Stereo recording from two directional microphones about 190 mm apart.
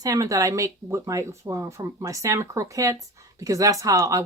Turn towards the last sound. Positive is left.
turn(degrees=-15)  # may be behind; listen again after turning